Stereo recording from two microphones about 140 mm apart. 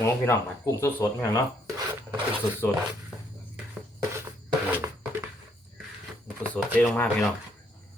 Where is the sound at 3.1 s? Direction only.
5° right (ahead or behind).